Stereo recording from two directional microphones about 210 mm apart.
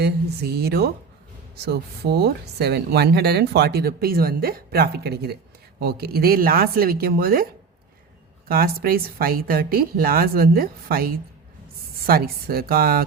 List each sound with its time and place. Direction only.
0.0 s speech: 50° right (ahead or behind)
8.4 s speech: 45° right (ahead or behind)